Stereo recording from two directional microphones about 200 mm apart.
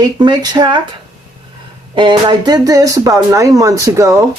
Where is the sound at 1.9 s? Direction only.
25° right (ahead or behind).